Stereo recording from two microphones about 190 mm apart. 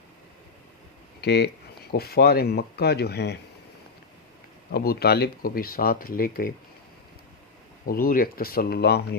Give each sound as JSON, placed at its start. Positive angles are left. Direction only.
{"t": 1.2, "sound": "speech", "side_deg": 60}
{"t": 4.7, "sound": "speech", "side_deg": 55}
{"t": 7.9, "sound": "speech", "side_deg": 50}